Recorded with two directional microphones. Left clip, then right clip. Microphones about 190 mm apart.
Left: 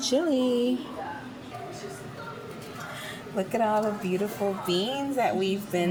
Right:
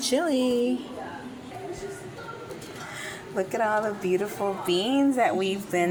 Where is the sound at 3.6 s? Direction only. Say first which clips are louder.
Even; 20° right (ahead or behind).